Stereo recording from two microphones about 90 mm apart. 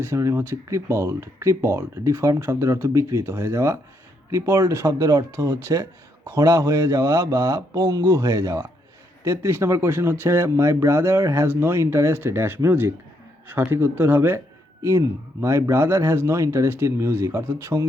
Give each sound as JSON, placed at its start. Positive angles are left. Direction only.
{"t": 0.0, "sound": "speech", "side_deg": -30}